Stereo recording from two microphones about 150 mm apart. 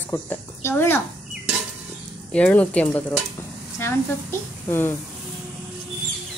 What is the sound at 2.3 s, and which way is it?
A woman's voice, 10° left (ahead or behind).